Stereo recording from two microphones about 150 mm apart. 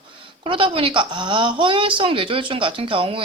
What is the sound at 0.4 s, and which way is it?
Speech, 35° right (ahead or behind).